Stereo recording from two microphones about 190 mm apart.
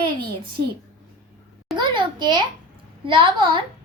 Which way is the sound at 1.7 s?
25° right (ahead or behind).